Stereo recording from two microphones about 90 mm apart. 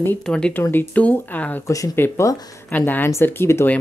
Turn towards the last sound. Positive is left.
turn(degrees=30)  # may be behind; listen again after turning